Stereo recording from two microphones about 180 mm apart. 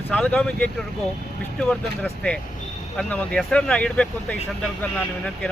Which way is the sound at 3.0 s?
5° left (ahead or behind).